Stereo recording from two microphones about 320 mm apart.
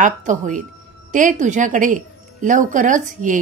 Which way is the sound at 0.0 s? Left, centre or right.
Right.